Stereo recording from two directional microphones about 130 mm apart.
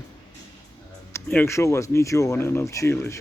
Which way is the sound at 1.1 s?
15° left (ahead or behind).